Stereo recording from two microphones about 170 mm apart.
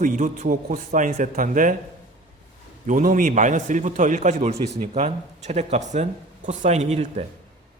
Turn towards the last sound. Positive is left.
turn(degrees=-40)  # may be behind; listen again after turning